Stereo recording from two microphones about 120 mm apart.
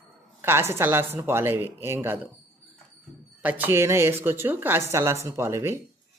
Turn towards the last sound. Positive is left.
turn(degrees=-20)  # may be behind; listen again after turning